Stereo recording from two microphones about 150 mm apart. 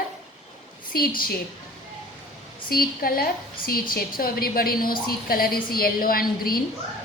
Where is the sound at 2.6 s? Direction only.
80° left.